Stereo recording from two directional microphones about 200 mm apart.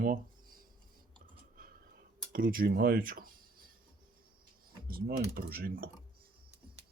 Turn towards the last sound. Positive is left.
turn(degrees=-50)  # may be behind; listen again after turning